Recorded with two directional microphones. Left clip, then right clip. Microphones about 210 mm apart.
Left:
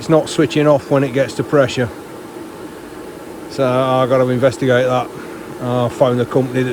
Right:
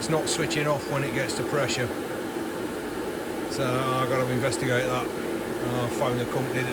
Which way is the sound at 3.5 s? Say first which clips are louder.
Left 13 dB; 5° right (ahead or behind).